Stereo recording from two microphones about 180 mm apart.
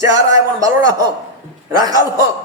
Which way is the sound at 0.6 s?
20° right (ahead or behind).